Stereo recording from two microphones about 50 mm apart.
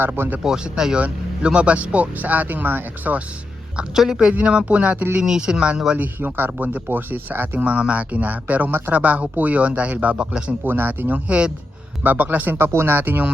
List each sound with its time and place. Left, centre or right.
0.0 s speech: right
0.4 s speech: centre
0.9 s speech: right
3.9 s speech: centre
6.0 s speech: right
10.6 s speech: right
11.3 s speech: right
12.0 s speech: right
12.5 s speech: right